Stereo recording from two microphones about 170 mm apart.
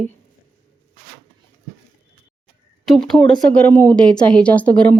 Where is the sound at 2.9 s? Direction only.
5° left (ahead or behind).